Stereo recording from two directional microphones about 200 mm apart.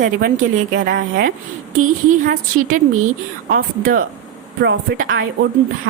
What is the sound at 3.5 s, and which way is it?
Speech, 45° right (ahead or behind).